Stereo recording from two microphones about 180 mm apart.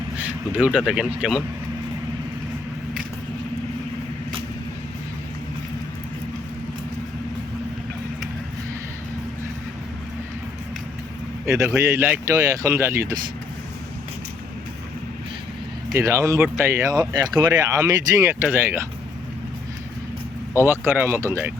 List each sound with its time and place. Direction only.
0.2 s vehicle: 10° right (ahead or behind)
0.9 s speech: 5° right (ahead or behind)
11.4 s speech: 15° right (ahead or behind)
16.0 s speech: 15° right (ahead or behind)
20.6 s speech: 15° right (ahead or behind)